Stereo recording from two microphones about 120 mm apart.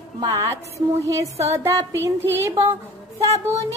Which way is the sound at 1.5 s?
25° right (ahead or behind).